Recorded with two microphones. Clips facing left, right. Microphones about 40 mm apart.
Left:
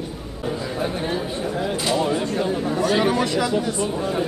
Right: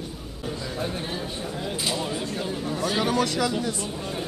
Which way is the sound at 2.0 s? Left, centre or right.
Centre.